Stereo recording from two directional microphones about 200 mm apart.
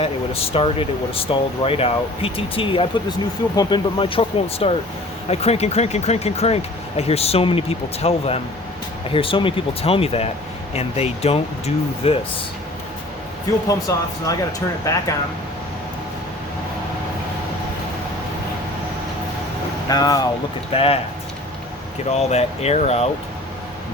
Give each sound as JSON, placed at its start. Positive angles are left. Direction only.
{"t": 0.0, "sound": "speech", "side_deg": 30}
{"t": 13.7, "sound": "speech", "side_deg": 15}
{"t": 19.9, "sound": "speech", "side_deg": 20}
{"t": 22.1, "sound": "speech", "side_deg": 35}